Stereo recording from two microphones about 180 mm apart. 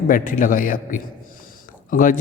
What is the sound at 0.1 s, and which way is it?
A man's voice, 50° left (ahead or behind).